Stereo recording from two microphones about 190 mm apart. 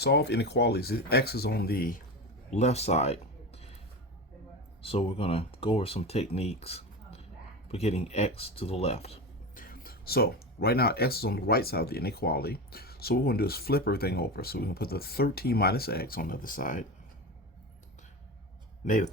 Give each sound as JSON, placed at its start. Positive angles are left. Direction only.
{"t": 0.0, "sound": "speech", "side_deg": 60}
{"t": 2.5, "sound": "speech", "side_deg": 35}
{"t": 4.8, "sound": "speech", "side_deg": 30}
{"t": 9.6, "sound": "speech", "side_deg": 50}
{"t": 18.9, "sound": "speech", "side_deg": 40}